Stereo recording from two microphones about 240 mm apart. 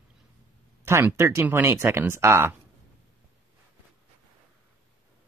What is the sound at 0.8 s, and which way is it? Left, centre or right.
Speech, centre.